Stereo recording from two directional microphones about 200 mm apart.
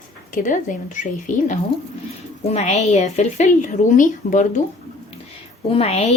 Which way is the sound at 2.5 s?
35° left (ahead or behind).